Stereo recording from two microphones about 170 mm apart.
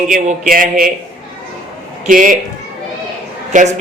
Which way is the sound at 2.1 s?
50° right (ahead or behind).